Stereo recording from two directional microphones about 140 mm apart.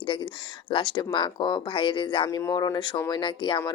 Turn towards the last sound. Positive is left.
turn(degrees=35)  # may be behind; listen again after turning